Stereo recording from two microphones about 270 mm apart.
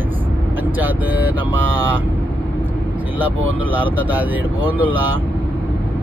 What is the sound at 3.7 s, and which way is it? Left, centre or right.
Speech, centre.